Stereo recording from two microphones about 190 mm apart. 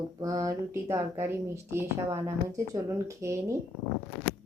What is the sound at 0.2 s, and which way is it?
A woman's voice, 20° right (ahead or behind).